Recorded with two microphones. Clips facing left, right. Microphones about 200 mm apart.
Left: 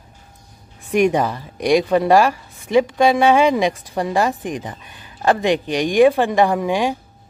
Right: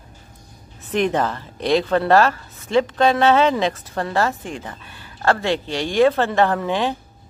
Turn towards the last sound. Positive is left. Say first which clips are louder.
# left 2 dB
turn(degrees=10)  # may be behind; listen again after turning